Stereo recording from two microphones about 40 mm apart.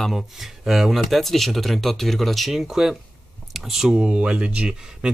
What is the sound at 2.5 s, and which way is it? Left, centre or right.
Speech, centre.